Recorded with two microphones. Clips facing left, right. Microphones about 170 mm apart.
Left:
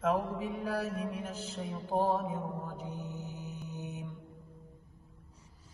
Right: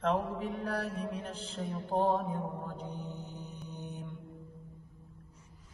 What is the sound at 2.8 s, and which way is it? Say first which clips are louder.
Mantra: even; 35° right (ahead or behind).